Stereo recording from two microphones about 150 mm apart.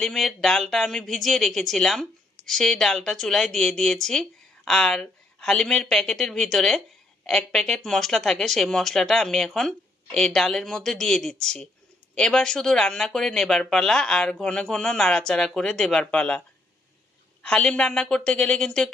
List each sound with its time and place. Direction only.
0.0 s speech: centre (ahead or behind)
17.4 s speech: 5° left (ahead or behind)